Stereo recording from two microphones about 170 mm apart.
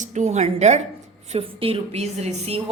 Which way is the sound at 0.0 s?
45° right (ahead or behind).